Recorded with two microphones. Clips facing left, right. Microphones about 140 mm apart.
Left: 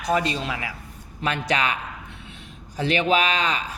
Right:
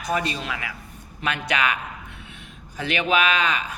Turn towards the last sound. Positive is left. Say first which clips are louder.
# even
turn(degrees=35)  # may be behind; listen again after turning